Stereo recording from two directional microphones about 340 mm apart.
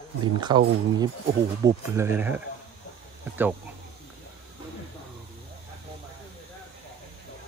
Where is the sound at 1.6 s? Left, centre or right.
Centre.